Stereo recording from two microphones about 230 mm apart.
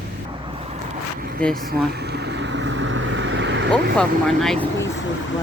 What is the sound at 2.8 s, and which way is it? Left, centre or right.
Vehicle, right.